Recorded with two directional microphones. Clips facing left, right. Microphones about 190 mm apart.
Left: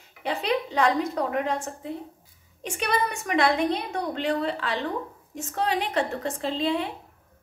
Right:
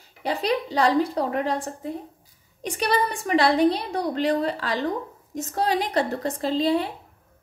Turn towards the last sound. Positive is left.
turn(degrees=-35)  # may be behind; listen again after turning